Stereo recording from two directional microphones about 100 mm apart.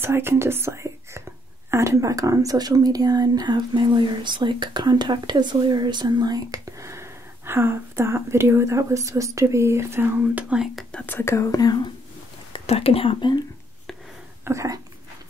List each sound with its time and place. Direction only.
0.0 s speech: 25° right (ahead or behind)
10.3 s speech: 10° right (ahead or behind)
10.9 s speech: 15° left (ahead or behind); by 11.9 s 40° left (ahead or behind)
12.5 s speech: 80° left
14.4 s speech: 30° right (ahead or behind)